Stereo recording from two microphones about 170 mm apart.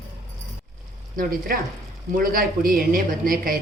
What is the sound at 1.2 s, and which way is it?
Speech, 60° right (ahead or behind).